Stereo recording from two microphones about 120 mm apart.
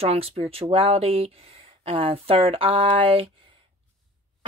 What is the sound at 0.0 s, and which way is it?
Speech, 55° right (ahead or behind).